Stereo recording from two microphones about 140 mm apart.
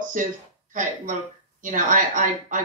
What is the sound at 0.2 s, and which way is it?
Speech, 65° right (ahead or behind).